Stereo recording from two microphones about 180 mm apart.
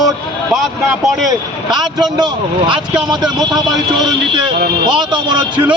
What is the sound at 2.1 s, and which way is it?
Speech, 25° right (ahead or behind).